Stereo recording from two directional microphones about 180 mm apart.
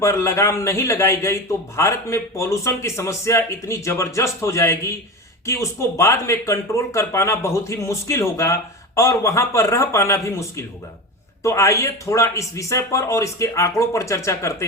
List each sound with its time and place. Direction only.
0.0 s a man's voice: 15° left (ahead or behind)